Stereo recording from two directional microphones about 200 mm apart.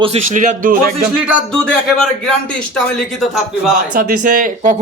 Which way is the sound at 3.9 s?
45° right (ahead or behind).